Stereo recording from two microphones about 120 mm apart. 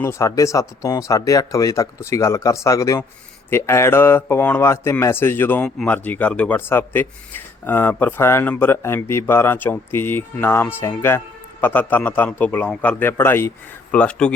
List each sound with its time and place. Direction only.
0.0 s speech: 25° left (ahead or behind)